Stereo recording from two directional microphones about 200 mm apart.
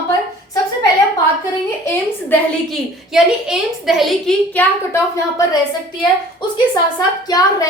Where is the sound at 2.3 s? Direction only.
Centre (ahead or behind).